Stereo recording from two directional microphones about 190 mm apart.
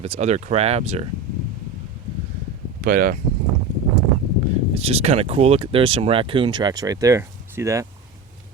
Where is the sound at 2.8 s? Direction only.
50° right (ahead or behind).